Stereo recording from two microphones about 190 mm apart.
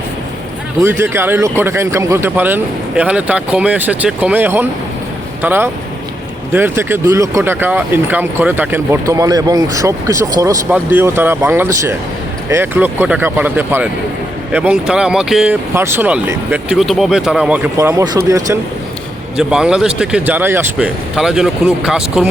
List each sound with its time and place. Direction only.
0.8 s speech: 10° right (ahead or behind)
19.4 s speech: 5° right (ahead or behind)